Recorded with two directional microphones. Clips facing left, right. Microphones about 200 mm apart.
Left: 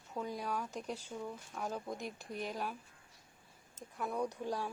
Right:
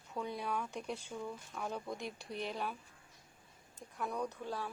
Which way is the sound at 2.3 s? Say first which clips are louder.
Even; 45° left (ahead or behind).